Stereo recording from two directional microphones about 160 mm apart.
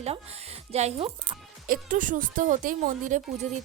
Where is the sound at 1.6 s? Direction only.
60° right (ahead or behind).